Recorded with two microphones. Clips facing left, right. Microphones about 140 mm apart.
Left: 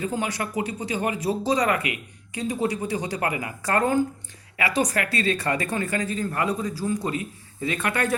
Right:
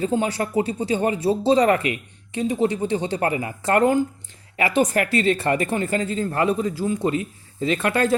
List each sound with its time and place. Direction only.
0.0 s speech: 30° right (ahead or behind)